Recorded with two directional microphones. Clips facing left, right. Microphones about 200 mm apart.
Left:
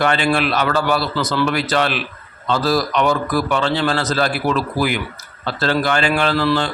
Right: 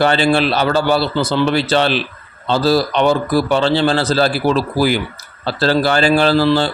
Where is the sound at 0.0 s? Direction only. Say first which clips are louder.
Right 4 dB; 30° right (ahead or behind).